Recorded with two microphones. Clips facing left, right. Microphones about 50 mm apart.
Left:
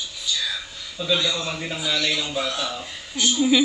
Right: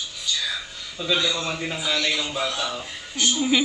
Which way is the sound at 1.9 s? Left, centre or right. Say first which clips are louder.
Left 1 dB; right.